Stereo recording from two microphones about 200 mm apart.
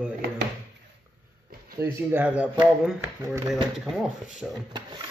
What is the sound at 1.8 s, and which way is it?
Speech, 10° right (ahead or behind).